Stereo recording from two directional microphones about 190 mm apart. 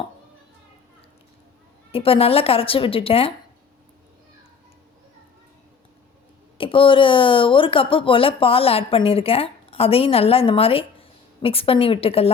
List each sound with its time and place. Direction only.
1.9 s speech: 30° left (ahead or behind)
6.6 s speech: 30° left (ahead or behind)